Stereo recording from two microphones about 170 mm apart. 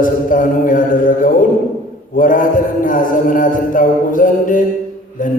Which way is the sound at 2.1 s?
50° left (ahead or behind).